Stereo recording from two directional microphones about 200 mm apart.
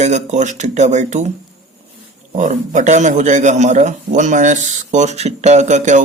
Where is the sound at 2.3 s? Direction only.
40° right (ahead or behind).